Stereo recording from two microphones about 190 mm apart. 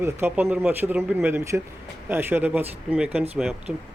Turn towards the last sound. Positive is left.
turn(degrees=-5)  # may be behind; listen again after turning